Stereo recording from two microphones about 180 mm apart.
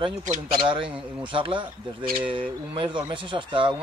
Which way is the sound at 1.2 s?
25° right (ahead or behind).